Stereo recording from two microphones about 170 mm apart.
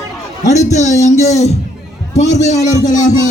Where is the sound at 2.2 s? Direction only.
40° left (ahead or behind).